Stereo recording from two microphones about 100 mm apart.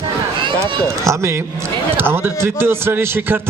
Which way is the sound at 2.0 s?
20° right (ahead or behind).